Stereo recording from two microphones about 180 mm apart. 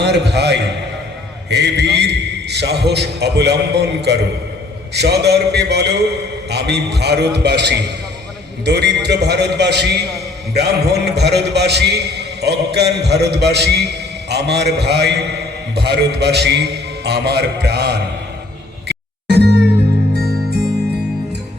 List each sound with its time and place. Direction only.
0.0 s a man's voice: 65° right (ahead or behind)
18.9 s music: 65° right (ahead or behind)